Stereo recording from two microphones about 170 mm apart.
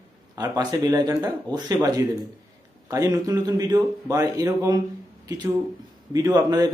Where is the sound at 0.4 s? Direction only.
20° right (ahead or behind).